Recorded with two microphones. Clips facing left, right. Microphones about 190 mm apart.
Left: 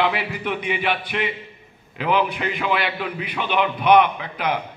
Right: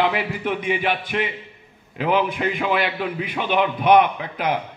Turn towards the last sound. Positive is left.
turn(degrees=-45)  # may be behind; listen again after turning